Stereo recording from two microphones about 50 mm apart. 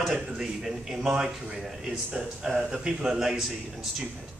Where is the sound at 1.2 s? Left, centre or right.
Right.